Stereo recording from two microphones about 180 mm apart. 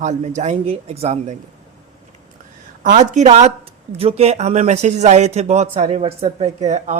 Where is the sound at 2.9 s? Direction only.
40° right (ahead or behind).